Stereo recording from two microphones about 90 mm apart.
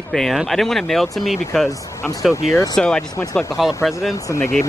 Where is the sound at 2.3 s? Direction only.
35° left (ahead or behind).